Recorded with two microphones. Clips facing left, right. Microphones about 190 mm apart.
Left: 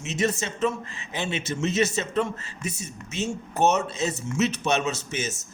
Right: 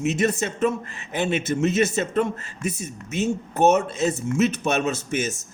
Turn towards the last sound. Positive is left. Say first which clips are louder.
# right 4 dB
turn(degrees=-55)  # may be behind; listen again after turning